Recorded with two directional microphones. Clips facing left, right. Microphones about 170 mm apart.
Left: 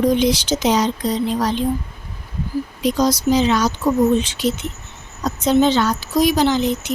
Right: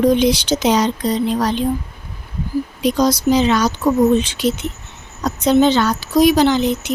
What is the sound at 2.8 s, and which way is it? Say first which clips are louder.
Speech: right 2 dB; 65° right (ahead or behind).